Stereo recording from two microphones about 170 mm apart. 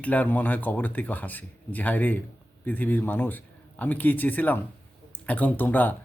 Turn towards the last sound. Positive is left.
turn(degrees=10)  # may be behind; listen again after turning